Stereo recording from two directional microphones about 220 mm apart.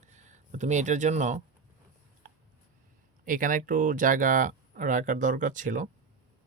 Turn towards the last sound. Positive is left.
turn(degrees=-35)  # may be behind; listen again after turning